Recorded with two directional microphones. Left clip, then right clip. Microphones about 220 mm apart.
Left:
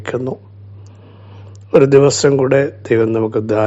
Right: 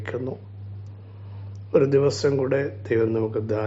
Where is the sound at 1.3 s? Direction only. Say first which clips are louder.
Left 9 dB; 40° left (ahead or behind).